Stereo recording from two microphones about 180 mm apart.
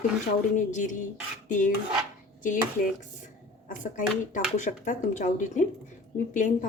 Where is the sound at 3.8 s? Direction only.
45° left (ahead or behind).